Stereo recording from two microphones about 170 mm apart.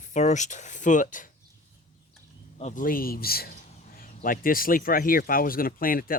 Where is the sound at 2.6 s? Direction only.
40° left (ahead or behind).